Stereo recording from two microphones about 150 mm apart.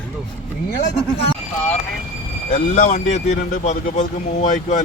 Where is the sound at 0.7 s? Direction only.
90° left.